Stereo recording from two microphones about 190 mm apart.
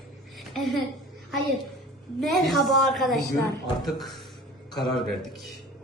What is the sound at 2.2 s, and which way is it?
Speech, centre (ahead or behind).